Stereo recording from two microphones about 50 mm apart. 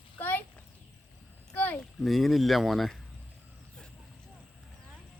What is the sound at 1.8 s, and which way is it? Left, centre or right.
Speech, centre.